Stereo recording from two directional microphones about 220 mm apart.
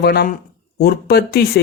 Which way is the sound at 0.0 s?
45° left (ahead or behind).